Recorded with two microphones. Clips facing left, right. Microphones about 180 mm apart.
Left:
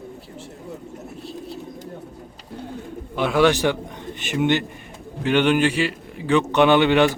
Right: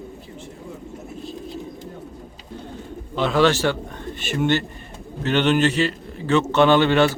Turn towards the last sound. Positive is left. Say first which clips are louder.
# even
turn(degrees=15)  # may be behind; listen again after turning